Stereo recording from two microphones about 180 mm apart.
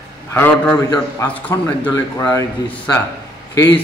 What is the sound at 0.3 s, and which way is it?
A man's voice, 10° left (ahead or behind).